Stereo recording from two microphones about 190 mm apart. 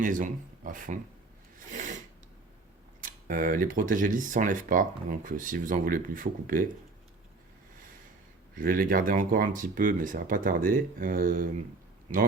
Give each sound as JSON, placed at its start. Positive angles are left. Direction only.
{"t": 0.0, "sound": "speech", "side_deg": -45}
{"t": 1.5, "sound": "a sound", "side_deg": -40}
{"t": 3.0, "sound": "speech", "side_deg": -45}
{"t": 8.5, "sound": "speech", "side_deg": -50}